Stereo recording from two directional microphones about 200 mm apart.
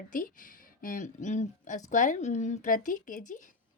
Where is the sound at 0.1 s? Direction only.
45° left (ahead or behind).